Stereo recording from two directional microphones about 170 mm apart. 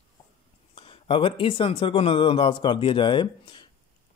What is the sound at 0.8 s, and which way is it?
Speech, 30° left (ahead or behind).